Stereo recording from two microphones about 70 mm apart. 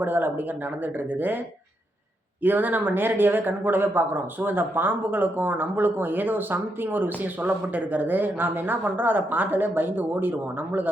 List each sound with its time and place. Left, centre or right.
0.0 s speech: right
2.4 s speech: right